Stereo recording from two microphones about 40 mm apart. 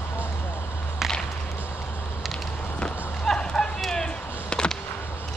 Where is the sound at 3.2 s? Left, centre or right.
Centre.